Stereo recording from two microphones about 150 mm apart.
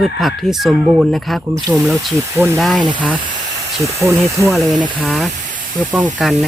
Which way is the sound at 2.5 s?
Centre (ahead or behind).